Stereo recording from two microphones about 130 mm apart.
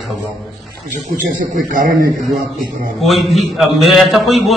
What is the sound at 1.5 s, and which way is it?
Speech, 90° right.